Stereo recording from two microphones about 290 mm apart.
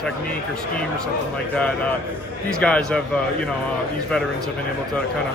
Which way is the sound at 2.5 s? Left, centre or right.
Centre.